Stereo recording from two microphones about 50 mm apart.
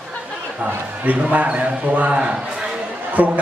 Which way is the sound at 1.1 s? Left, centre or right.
Right.